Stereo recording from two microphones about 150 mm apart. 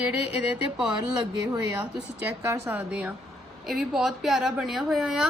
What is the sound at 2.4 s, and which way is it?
Speech, 20° right (ahead or behind).